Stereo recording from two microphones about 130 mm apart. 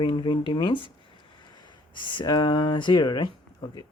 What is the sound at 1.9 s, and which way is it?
Speech, 35° left (ahead or behind).